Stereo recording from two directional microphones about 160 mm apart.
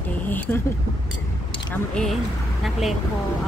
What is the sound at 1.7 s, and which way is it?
Speech, 5° left (ahead or behind).